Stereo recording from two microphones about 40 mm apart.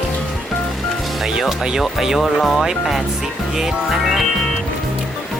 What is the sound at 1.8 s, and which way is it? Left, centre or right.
Music, centre.